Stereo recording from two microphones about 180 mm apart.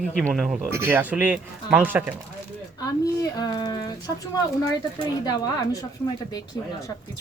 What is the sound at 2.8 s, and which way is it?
Speech, 20° left (ahead or behind).